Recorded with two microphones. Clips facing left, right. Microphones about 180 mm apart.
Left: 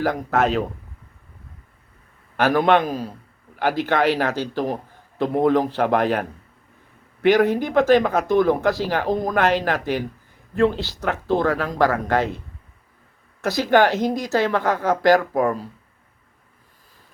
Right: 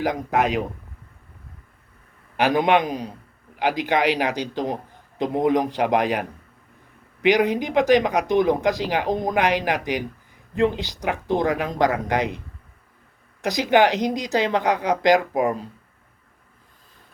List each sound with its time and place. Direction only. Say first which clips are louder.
0.0 s speech: left 1 dB; 15° right (ahead or behind)
2.3 s speech: left 1 dB; 15° right (ahead or behind)
13.4 s speech: left 1 dB; 15° right (ahead or behind)